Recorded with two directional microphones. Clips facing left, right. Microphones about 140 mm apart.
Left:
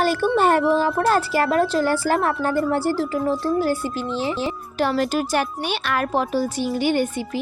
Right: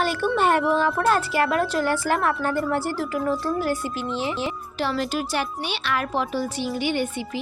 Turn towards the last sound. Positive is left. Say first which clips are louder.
# left 4 dB
turn(degrees=45)  # may be behind; listen again after turning